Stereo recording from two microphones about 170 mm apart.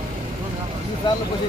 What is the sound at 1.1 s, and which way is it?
Speech, 25° left (ahead or behind).